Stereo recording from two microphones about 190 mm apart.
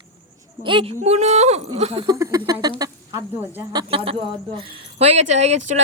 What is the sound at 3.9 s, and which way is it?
Speech, 30° right (ahead or behind).